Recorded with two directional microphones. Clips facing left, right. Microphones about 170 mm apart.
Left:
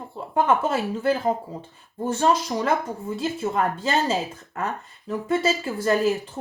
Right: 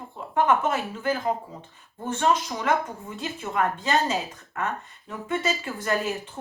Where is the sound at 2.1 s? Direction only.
35° left (ahead or behind).